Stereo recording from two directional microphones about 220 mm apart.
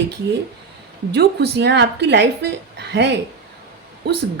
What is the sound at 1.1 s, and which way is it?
A woman's voice, 50° right (ahead or behind).